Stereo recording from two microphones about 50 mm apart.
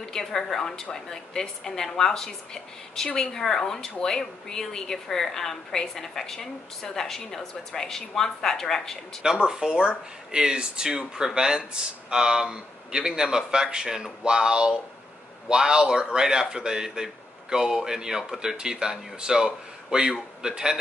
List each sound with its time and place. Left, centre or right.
0.1 s a woman's voice: centre
9.2 s speech: centre